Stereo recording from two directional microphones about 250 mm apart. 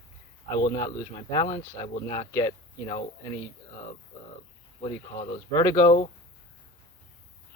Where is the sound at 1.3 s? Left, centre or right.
Centre.